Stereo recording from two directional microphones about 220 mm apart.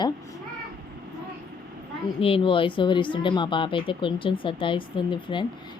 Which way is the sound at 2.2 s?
25° left (ahead or behind).